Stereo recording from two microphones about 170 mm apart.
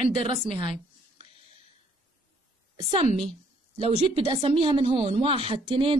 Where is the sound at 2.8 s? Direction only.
30° right (ahead or behind).